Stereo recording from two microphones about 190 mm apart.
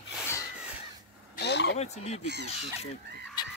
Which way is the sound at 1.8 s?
35° left (ahead or behind).